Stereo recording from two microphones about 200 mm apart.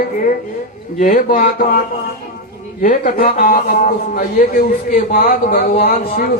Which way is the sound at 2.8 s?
40° left (ahead or behind).